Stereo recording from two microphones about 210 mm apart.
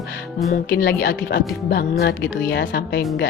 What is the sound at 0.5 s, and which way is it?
Speech, 45° left (ahead or behind).